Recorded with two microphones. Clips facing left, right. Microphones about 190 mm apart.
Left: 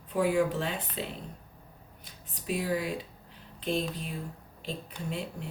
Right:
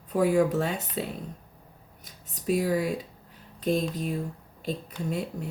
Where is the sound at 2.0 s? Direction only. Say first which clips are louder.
Right 7 dB; 45° right (ahead or behind).